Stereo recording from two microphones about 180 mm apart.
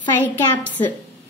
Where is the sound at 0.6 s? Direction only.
10° left (ahead or behind).